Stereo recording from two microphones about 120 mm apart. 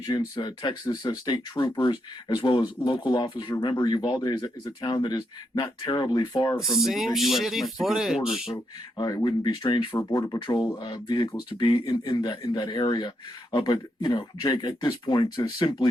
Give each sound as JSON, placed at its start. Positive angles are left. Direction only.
{"t": 0.1, "sound": "speech", "side_deg": 35}
{"t": 6.6, "sound": "speech", "side_deg": 0}
{"t": 9.0, "sound": "speech", "side_deg": 30}